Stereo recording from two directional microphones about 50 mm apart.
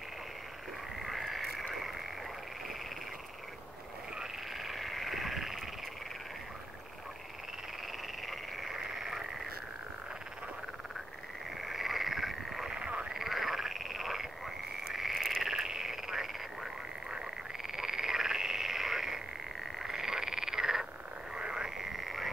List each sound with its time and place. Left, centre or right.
0.9 s frog: centre
4.2 s frog: centre
8.3 s frog: centre
11.6 s frog: centre
12.6 s frog: centre
13.1 s frog: centre
15.5 s frog: centre